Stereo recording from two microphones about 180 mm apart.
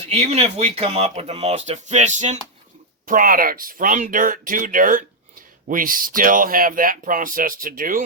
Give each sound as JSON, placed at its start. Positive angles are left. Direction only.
{"t": 0.0, "sound": "speech", "side_deg": -35}
{"t": 3.1, "sound": "speech", "side_deg": -50}